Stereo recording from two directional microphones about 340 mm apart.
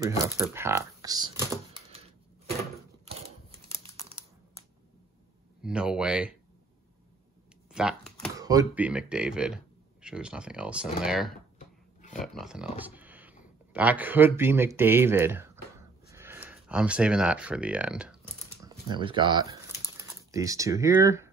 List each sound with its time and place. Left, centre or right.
0.4 s speech: centre
3.1 s crumpling: centre
5.6 s speech: centre
7.7 s speech: centre
16.1 s a sound: centre